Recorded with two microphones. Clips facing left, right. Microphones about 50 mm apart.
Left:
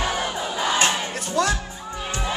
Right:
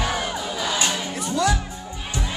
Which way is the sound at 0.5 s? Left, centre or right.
Left.